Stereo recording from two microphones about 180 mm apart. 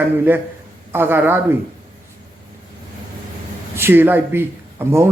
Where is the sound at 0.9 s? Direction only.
10° right (ahead or behind).